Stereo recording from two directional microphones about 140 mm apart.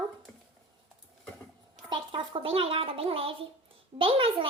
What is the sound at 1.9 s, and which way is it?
Speech, 35° right (ahead or behind).